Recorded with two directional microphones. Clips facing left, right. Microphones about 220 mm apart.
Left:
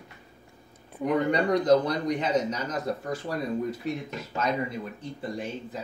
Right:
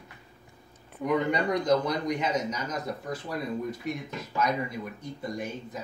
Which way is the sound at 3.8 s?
30° left (ahead or behind).